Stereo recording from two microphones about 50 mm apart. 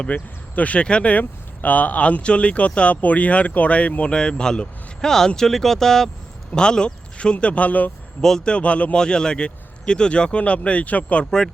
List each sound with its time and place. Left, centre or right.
0.0 s speech: left